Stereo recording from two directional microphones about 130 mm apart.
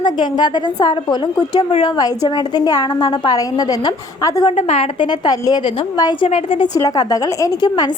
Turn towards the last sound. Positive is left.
turn(degrees=30)  # may be behind; listen again after turning